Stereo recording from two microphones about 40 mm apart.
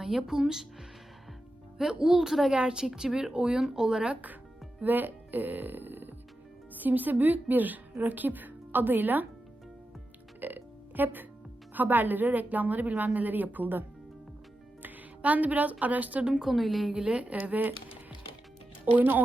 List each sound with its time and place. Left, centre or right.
0.2 s speech: centre
1.8 s speech: centre
4.1 s a woman's voice: right
10.4 s music: right
11.7 s a woman's voice: right
15.2 s a woman's voice: right
16.4 s a woman's voice: centre
16.9 s speech: right
17.4 s a woman's voice: right
18.9 s a woman's voice: right